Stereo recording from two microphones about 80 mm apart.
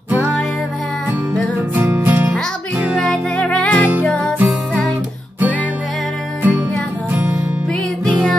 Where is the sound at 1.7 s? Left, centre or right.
Right.